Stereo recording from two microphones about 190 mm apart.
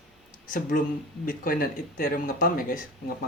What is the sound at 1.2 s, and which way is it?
Speech, 50° left (ahead or behind).